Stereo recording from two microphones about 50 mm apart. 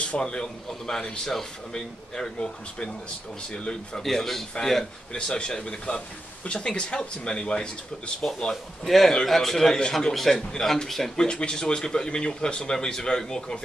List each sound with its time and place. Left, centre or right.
0.0 s a man's voice: left
5.1 s speech: centre
8.8 s a man's voice: centre
11.1 s a man's voice: centre